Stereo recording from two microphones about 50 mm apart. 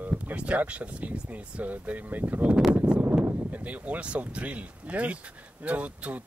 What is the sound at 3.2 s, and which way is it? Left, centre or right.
Speech, right.